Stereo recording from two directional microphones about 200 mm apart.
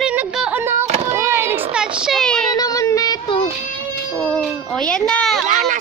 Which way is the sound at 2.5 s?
20° left (ahead or behind).